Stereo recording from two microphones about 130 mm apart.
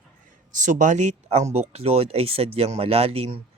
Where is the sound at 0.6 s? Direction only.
75° right (ahead or behind).